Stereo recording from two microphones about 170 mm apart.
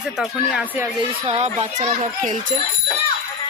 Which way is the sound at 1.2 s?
40° right (ahead or behind).